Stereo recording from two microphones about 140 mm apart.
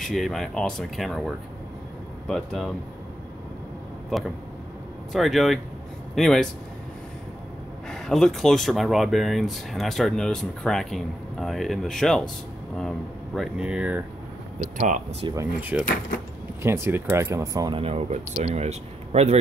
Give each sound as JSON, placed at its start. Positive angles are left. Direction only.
{"t": 0.0, "sound": "speech", "side_deg": 0}
{"t": 5.1, "sound": "speech", "side_deg": 0}
{"t": 7.9, "sound": "speech", "side_deg": 5}
{"t": 14.6, "sound": "speech", "side_deg": -60}
{"t": 15.7, "sound": "speech", "side_deg": -10}
{"t": 17.7, "sound": "speech", "side_deg": -45}